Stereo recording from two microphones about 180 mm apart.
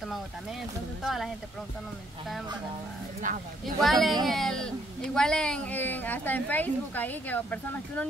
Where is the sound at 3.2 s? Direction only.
45° right (ahead or behind).